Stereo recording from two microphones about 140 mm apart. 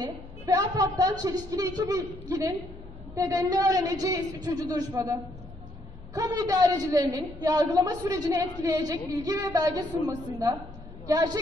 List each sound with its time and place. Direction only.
0.0 s a woman's voice: 25° right (ahead or behind)